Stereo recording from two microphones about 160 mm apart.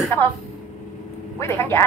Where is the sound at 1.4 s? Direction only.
15° left (ahead or behind).